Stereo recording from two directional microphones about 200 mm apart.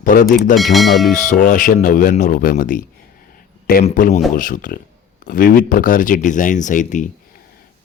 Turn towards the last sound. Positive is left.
turn(degrees=40)  # may be behind; listen again after turning